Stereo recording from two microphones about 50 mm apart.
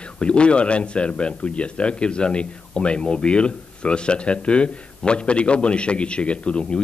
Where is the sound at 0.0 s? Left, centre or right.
Left.